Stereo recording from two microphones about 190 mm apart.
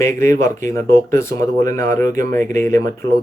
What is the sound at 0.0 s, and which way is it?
Speech, 15° left (ahead or behind).